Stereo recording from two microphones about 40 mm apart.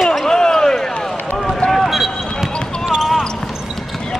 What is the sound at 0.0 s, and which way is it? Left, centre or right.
Basketball bounce, centre.